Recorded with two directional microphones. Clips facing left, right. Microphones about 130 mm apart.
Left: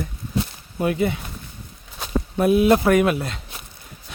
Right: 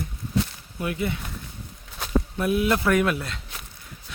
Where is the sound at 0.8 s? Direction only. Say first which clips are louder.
Left 6 dB; 25° left (ahead or behind).